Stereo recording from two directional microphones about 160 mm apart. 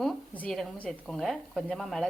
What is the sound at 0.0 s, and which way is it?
Speech, 5° left (ahead or behind).